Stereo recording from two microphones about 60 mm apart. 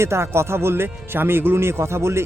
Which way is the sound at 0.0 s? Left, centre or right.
Right.